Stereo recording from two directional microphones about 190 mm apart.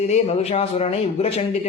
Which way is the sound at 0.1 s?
35° left (ahead or behind).